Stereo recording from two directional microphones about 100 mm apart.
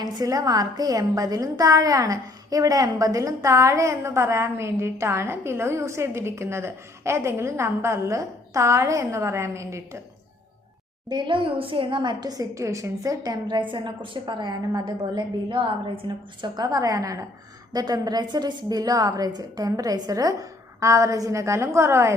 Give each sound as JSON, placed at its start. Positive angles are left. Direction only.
{"t": 0.0, "sound": "a woman's voice", "side_deg": -40}
{"t": 11.1, "sound": "a woman's voice", "side_deg": -55}